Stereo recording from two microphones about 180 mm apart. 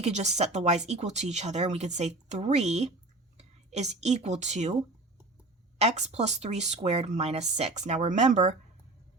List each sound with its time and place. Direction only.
0.0 s speech: 40° right (ahead or behind)
5.8 s speech: 35° right (ahead or behind)